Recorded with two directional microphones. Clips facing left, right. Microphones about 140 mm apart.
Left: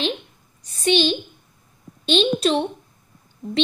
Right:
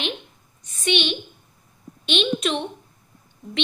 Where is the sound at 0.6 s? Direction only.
35° left (ahead or behind).